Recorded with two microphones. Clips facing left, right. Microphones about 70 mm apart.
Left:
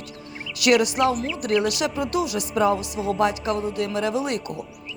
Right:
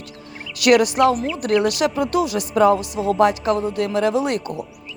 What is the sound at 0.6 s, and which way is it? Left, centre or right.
A man's voice, right.